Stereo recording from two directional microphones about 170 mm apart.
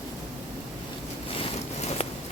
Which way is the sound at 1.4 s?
40° left (ahead or behind).